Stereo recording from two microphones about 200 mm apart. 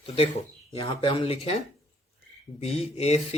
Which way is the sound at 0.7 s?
25° left (ahead or behind).